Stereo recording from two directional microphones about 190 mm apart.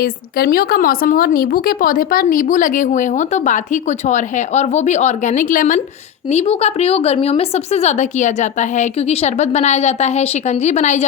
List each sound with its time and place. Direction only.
0.0 s speech: 50° left (ahead or behind)
6.3 s speech: 30° left (ahead or behind)